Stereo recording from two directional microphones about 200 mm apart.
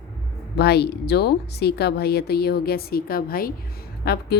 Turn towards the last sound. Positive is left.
turn(degrees=50)  # may be behind; listen again after turning